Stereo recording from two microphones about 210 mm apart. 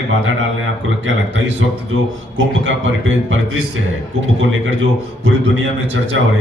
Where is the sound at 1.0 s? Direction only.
60° right (ahead or behind).